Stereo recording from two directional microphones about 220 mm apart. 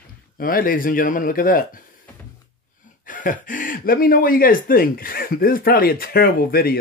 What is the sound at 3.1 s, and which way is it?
Speech, 35° left (ahead or behind).